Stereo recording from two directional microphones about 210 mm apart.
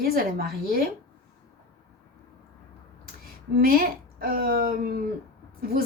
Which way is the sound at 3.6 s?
45° right (ahead or behind).